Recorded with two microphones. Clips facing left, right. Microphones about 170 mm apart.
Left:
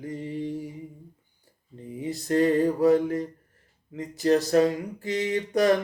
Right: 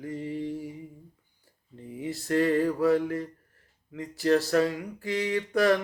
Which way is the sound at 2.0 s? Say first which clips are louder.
Left 3 dB; 20° left (ahead or behind).